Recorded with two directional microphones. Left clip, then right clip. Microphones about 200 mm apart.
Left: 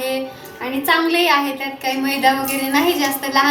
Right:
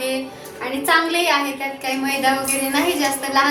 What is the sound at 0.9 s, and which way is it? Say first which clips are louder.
A woman's voice: left 2 dB; 25° left (ahead or behind).